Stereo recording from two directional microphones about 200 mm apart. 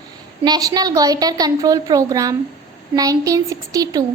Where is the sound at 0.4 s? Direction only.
20° right (ahead or behind).